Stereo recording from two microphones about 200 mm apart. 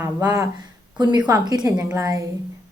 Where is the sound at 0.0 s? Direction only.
15° right (ahead or behind).